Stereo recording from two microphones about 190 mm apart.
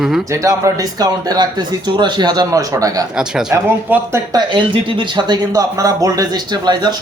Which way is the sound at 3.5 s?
15° right (ahead or behind).